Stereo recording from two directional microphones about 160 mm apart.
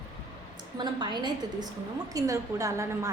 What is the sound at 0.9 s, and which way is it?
A woman's voice, 30° right (ahead or behind).